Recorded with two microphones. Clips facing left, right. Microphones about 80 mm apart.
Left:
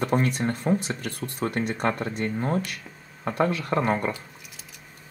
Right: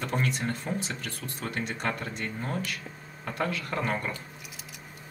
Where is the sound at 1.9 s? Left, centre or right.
Left.